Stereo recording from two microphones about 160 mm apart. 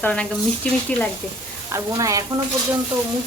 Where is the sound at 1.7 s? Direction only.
20° right (ahead or behind).